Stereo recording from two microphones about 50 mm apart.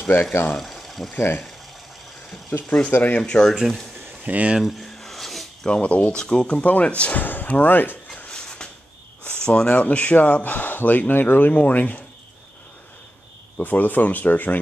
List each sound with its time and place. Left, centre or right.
0.0 s speech: left
0.6 s a sound: centre
1.1 s speech: left
3.2 s speech: centre
4.2 s speech: right
4.6 s a sound: centre
5.7 s speech: left
6.1 s speech: centre
6.6 s speech: left
8.3 s a sound: centre
9.4 s speech: centre
13.6 s speech: left